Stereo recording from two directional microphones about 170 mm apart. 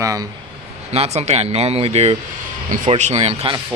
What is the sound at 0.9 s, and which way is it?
Speech, 40° right (ahead or behind).